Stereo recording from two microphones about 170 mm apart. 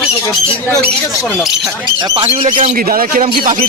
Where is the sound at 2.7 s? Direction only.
55° right (ahead or behind).